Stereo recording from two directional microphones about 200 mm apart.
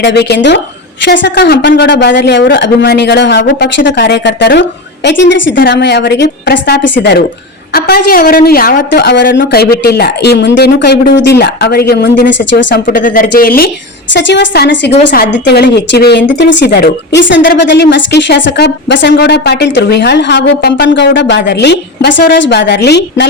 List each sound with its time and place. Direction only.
0.0 s a woman's voice: 55° left (ahead or behind)
12.8 s a woman's voice: 45° left (ahead or behind)
14.1 s speech: 65° left (ahead or behind)